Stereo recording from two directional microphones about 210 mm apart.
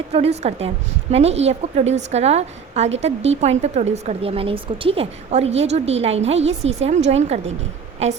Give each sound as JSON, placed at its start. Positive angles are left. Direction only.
{"t": 0.1, "sound": "a woman's voice", "side_deg": -30}